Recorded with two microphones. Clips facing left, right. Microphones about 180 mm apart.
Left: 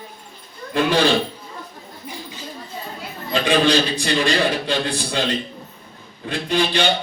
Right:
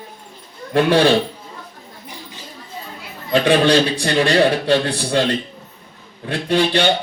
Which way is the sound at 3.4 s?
65° right (ahead or behind).